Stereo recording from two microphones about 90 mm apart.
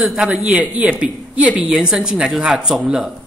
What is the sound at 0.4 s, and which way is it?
Speech, 15° right (ahead or behind).